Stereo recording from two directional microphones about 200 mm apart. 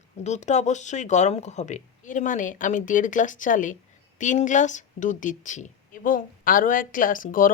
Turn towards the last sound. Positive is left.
turn(degrees=40)  # may be behind; listen again after turning